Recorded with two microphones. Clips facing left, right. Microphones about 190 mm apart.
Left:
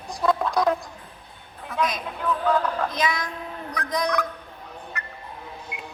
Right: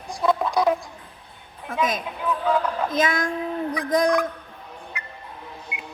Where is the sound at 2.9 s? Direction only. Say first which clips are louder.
Right 4 dB; 50° right (ahead or behind).